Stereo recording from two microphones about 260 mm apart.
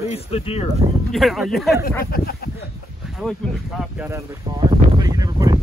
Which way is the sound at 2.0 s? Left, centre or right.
Left.